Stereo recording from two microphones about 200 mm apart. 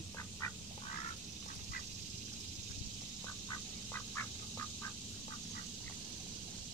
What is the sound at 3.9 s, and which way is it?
Duck, 10° left (ahead or behind).